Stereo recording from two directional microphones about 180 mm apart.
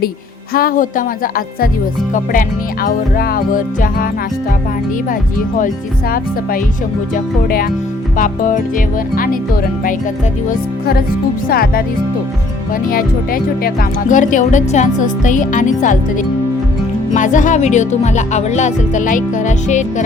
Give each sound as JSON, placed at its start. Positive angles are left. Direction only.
{"t": 0.5, "sound": "speech", "side_deg": 50}
{"t": 2.8, "sound": "speech", "side_deg": 55}
{"t": 5.5, "sound": "speech", "side_deg": 50}
{"t": 8.1, "sound": "speech", "side_deg": 50}
{"t": 10.5, "sound": "speech", "side_deg": 55}
{"t": 12.9, "sound": "speech", "side_deg": 55}